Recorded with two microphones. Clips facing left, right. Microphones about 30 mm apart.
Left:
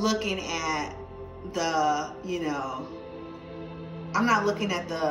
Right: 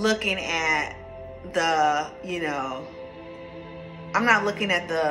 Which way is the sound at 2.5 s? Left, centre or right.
Right.